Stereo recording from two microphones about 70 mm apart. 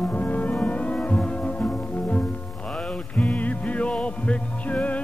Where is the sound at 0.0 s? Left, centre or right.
Left.